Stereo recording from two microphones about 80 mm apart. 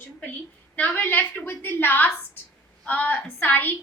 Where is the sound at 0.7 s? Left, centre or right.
Centre.